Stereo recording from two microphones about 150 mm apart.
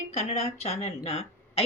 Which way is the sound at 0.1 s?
45° left (ahead or behind).